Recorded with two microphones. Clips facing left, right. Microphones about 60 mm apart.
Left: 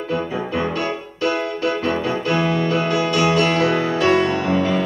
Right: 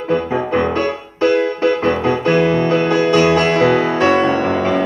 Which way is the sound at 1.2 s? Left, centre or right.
Right.